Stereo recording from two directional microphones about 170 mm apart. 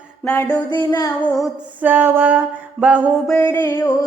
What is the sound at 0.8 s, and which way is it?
Speech, 20° left (ahead or behind).